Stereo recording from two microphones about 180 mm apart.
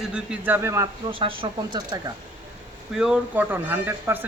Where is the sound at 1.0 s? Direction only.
30° right (ahead or behind).